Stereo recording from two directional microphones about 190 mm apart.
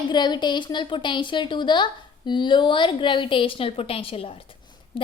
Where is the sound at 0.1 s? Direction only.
25° left (ahead or behind).